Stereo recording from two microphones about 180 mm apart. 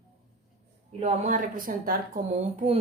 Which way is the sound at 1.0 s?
45° right (ahead or behind).